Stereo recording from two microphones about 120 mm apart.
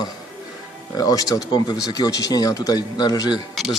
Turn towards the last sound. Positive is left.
turn(degrees=35)  # may be behind; listen again after turning